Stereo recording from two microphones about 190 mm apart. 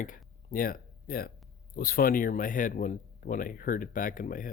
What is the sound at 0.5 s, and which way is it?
Speech, 50° left (ahead or behind).